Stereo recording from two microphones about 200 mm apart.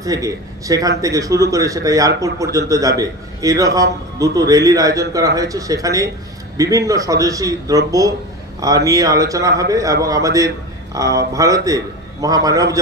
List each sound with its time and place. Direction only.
0.0 s a man's voice: 15° right (ahead or behind)